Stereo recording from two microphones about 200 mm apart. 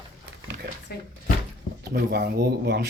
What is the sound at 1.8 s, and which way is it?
Speech, 50° right (ahead or behind).